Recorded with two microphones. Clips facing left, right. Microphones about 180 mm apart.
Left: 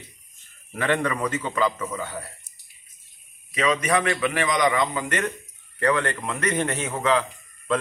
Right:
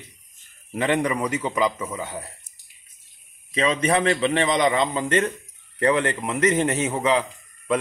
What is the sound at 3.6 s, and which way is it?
A man's voice, 30° right (ahead or behind).